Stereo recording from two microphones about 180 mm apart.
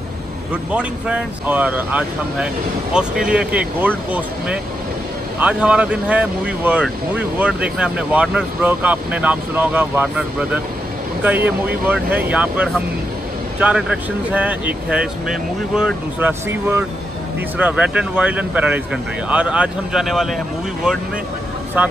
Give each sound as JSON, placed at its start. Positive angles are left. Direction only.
{"t": 0.5, "sound": "speech", "side_deg": -10}